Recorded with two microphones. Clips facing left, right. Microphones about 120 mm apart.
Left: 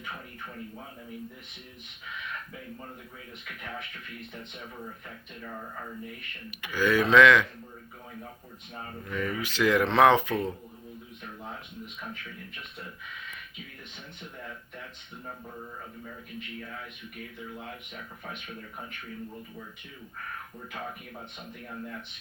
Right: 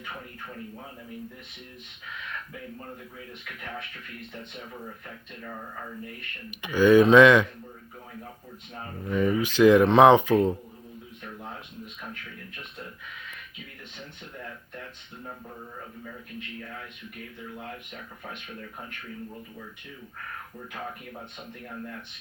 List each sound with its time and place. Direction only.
6.6 s speech: 20° right (ahead or behind)
9.0 s speech: 25° right (ahead or behind)